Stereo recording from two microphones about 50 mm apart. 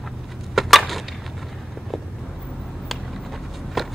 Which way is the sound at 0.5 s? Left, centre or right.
Centre.